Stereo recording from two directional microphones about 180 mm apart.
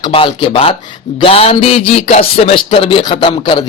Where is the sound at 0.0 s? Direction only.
30° left (ahead or behind).